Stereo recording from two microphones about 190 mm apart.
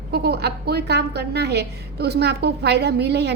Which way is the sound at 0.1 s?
60° right (ahead or behind).